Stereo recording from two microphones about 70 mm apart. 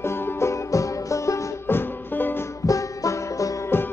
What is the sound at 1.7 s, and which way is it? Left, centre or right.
Music, left.